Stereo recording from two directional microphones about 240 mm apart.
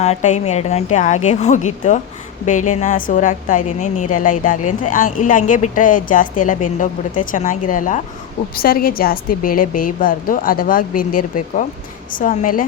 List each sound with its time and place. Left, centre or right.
0.0 s a woman's voice: left